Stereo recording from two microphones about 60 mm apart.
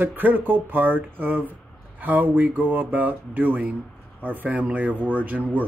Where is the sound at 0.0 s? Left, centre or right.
Right.